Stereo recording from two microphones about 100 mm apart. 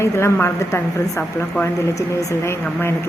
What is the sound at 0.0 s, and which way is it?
A woman's voice, 25° left (ahead or behind).